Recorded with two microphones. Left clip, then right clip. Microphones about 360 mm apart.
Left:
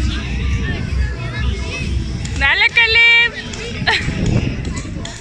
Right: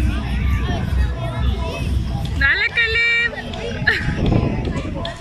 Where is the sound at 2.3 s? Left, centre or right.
Centre.